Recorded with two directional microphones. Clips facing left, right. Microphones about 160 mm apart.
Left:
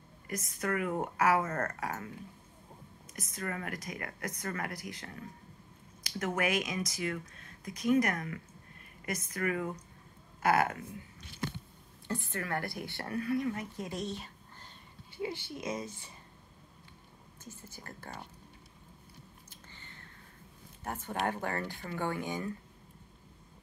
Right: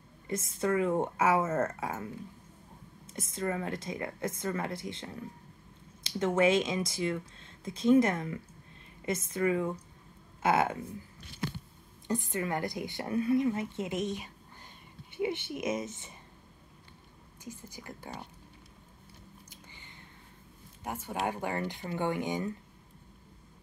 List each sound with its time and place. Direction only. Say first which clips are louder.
0.3 s speech: right 5 dB; 25° right (ahead or behind)
1.4 s speech: right 5 dB; 5° right (ahead or behind)
1.8 s speech: right 2 dB; 25° right (ahead or behind)
3.1 s speech: right 6 dB; 25° right (ahead or behind)
12.1 s speech: right 4 dB; 15° right (ahead or behind)
17.4 s speech: right 5 dB; 10° right (ahead or behind)
19.5 s a sound: right 1 dB; 15° right (ahead or behind)
20.8 s speech: right 1 dB; 10° right (ahead or behind)